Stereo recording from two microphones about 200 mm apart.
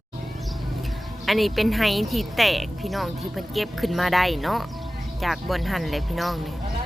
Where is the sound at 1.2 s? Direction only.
Centre (ahead or behind).